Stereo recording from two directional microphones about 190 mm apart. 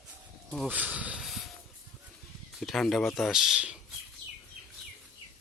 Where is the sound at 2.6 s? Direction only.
Centre (ahead or behind).